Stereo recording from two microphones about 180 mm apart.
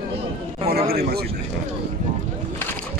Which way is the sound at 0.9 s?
60° right (ahead or behind).